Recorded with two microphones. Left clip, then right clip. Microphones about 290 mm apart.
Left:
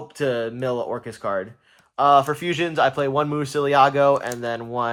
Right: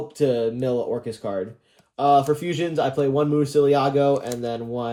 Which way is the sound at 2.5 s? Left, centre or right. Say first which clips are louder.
Left 3 dB; left.